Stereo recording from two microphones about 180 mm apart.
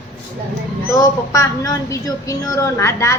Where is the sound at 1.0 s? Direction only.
20° left (ahead or behind).